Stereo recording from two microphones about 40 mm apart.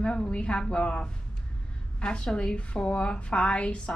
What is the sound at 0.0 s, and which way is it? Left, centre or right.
A woman's voice, left.